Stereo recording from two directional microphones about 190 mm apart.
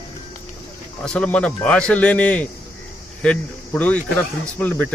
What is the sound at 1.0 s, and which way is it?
Speech, 5° left (ahead or behind).